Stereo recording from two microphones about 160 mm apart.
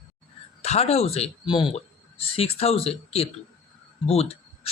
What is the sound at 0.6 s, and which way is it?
A man's voice, 40° left (ahead or behind).